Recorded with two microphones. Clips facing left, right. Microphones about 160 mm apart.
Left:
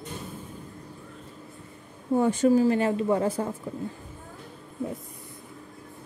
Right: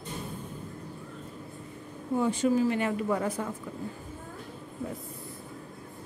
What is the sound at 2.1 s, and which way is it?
Speech, 45° left (ahead or behind).